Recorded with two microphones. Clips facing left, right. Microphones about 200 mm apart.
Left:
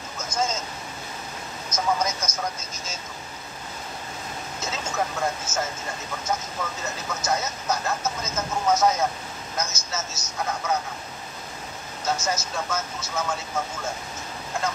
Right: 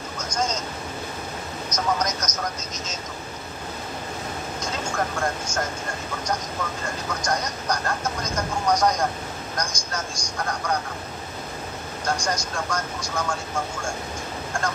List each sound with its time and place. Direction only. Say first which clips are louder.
2.0 s speech: even; 10° left (ahead or behind)
4.6 s speech: even; 5° left (ahead or behind)
12.0 s speech: even; 5° left (ahead or behind)